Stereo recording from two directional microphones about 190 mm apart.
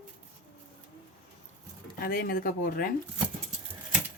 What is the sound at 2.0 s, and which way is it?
Speech, 50° left (ahead or behind).